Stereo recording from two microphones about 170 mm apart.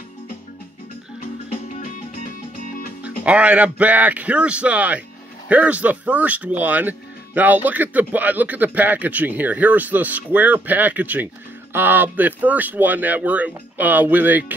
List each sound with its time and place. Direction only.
1.2 s music: 50° left (ahead or behind)
3.3 s speech: 5° right (ahead or behind)